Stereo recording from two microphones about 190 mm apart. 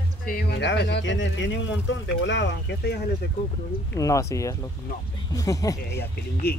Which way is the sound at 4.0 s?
15° left (ahead or behind).